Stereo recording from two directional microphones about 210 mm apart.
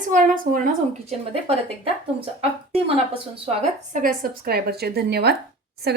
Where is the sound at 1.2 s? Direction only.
30° right (ahead or behind).